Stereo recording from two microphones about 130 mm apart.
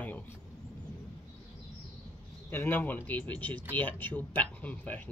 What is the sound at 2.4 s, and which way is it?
Speech, 15° left (ahead or behind).